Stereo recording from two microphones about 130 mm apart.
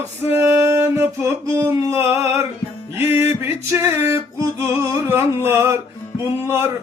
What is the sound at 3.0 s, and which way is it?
Music, 20° right (ahead or behind).